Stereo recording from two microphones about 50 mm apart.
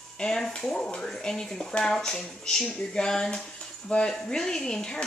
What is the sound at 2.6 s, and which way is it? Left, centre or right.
Speech, left.